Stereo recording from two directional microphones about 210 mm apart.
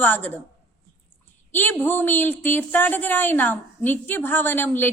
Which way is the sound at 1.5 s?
10° left (ahead or behind).